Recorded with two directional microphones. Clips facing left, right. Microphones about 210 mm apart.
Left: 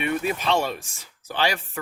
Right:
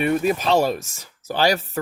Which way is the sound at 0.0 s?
40° right (ahead or behind).